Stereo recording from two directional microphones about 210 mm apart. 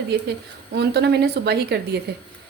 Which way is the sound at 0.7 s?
50° right (ahead or behind).